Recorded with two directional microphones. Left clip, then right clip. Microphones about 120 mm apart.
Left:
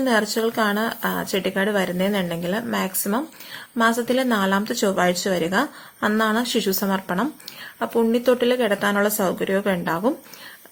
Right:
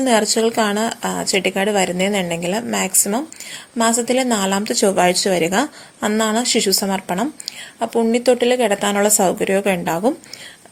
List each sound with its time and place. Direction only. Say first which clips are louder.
0.0 s a woman's voice: right 5 dB; 35° right (ahead or behind)